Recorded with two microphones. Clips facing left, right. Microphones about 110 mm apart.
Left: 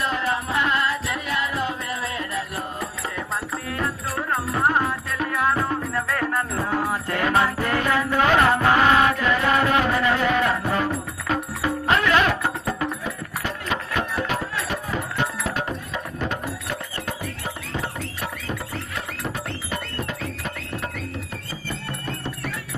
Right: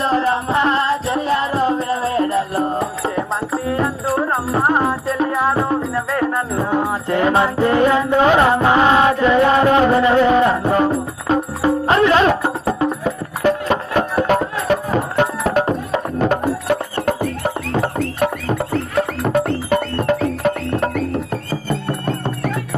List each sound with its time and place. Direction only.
0.0 s music: 30° right (ahead or behind)
13.1 s music: 40° right (ahead or behind)